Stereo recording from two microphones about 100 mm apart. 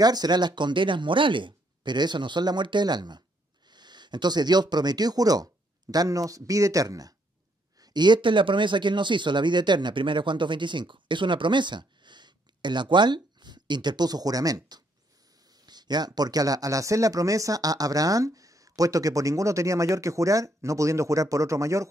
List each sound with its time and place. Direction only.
0.0 s speech: 40° right (ahead or behind)
7.8 s speech: 45° right (ahead or behind); by 21.8 s 30° right (ahead or behind)